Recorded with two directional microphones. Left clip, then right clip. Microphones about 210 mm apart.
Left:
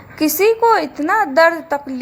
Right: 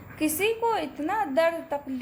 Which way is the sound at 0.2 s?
15° left (ahead or behind).